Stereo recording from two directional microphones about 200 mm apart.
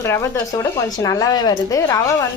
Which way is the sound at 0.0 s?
15° left (ahead or behind).